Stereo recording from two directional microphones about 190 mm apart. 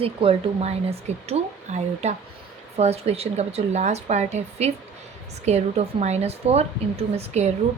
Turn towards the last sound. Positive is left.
turn(degrees=-35)  # may be behind; listen again after turning